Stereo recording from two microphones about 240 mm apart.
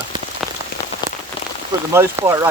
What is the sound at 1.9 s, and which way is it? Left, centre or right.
Speech, centre.